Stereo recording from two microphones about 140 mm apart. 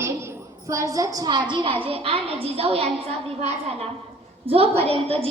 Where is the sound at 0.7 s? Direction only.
20° right (ahead or behind); by 2.8 s 45° right (ahead or behind).